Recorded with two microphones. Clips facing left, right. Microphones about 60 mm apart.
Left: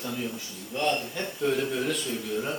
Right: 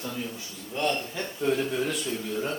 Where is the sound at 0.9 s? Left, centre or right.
Centre.